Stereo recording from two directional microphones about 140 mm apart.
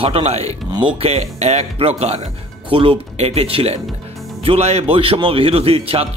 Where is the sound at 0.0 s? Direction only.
45° right (ahead or behind).